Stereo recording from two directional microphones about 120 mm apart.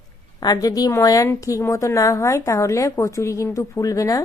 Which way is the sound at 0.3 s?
30° left (ahead or behind).